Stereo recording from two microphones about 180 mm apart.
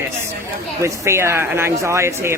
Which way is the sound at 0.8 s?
15° right (ahead or behind).